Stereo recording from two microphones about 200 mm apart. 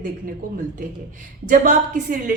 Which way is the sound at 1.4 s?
40° right (ahead or behind).